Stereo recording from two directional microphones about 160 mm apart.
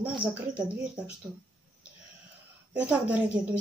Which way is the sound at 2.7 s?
10° right (ahead or behind).